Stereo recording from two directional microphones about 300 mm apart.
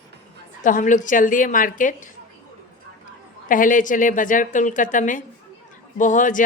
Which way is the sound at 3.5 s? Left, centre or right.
Left.